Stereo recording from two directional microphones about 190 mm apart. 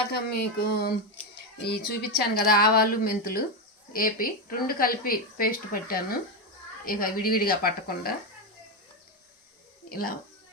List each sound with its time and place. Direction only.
0.1 s speech: 55° left (ahead or behind)
9.9 s speech: 50° left (ahead or behind)